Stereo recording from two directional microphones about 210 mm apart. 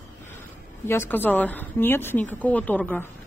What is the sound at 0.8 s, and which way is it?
A woman's voice, 10° left (ahead or behind).